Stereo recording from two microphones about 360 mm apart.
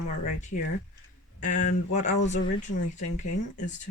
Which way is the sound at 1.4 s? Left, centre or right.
Centre.